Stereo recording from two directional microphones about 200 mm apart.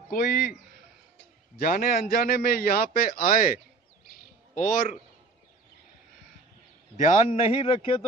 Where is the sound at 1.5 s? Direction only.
45° left (ahead or behind).